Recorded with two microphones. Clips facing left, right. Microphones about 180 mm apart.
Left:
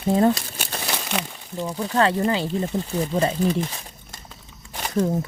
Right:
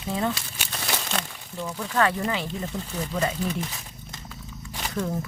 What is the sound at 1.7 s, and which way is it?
Speech, 30° left (ahead or behind).